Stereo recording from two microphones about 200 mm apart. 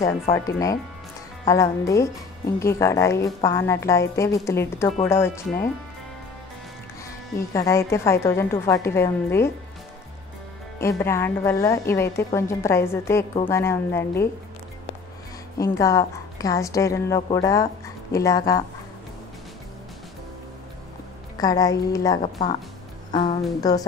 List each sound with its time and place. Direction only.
0.0 s a woman's voice: 15° left (ahead or behind)
7.3 s a woman's voice: 15° left (ahead or behind)
10.8 s a woman's voice: 15° left (ahead or behind)
15.5 s a woman's voice: 15° left (ahead or behind)
21.4 s a woman's voice: 20° left (ahead or behind)
22.2 s speech: 30° left (ahead or behind)